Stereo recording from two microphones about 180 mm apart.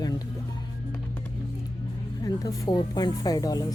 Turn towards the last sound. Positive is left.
turn(degrees=20)  # may be behind; listen again after turning